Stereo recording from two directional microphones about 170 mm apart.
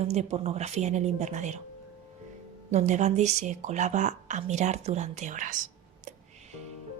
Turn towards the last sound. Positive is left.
turn(degrees=-45)  # may be behind; listen again after turning